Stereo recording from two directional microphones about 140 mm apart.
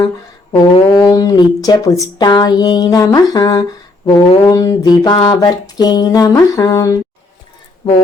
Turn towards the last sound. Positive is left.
turn(degrees=30)  # may be behind; listen again after turning